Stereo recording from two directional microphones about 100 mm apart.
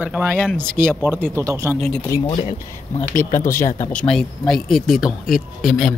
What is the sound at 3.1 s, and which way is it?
Speech, 30° left (ahead or behind).